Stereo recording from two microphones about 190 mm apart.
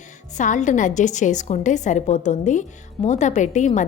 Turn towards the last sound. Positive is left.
turn(degrees=40)  # may be behind; listen again after turning